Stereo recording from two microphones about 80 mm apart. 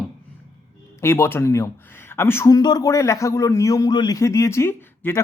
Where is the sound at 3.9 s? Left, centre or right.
Left.